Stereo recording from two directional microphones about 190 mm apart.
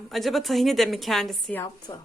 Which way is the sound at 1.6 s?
20° left (ahead or behind).